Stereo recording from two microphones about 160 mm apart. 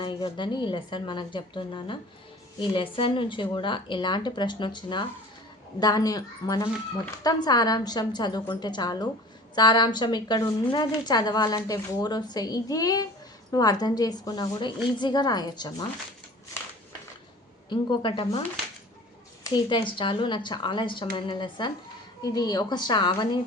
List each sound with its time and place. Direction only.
0.0 s a woman's voice: 30° left (ahead or behind)
17.7 s a woman's voice: 30° left (ahead or behind)
19.5 s a woman's voice: 30° left (ahead or behind)